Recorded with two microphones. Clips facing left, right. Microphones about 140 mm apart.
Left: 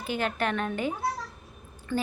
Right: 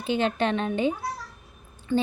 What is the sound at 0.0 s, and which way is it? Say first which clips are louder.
A woman's voice: right 4 dB; 25° right (ahead or behind).